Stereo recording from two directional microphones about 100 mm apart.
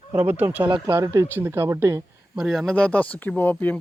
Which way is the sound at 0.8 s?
40° right (ahead or behind).